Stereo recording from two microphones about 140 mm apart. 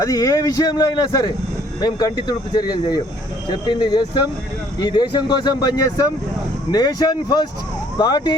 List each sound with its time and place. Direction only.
0.0 s a man's voice: 25° left (ahead or behind)